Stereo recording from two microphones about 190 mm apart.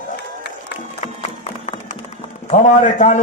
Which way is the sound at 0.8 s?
35° left (ahead or behind).